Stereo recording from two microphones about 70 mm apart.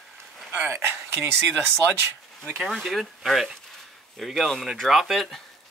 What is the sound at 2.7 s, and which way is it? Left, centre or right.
Speech, centre.